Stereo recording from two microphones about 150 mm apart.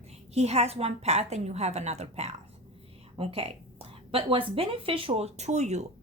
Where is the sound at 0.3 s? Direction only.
45° right (ahead or behind).